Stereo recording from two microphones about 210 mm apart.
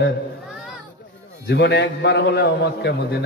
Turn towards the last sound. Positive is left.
turn(degrees=50)  # may be behind; listen again after turning